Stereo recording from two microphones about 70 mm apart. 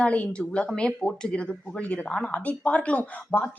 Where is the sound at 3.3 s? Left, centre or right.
Left.